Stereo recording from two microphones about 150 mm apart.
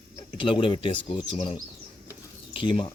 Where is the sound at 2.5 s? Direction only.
35° left (ahead or behind).